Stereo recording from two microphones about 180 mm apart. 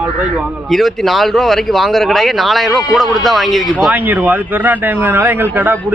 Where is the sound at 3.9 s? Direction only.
10° right (ahead or behind).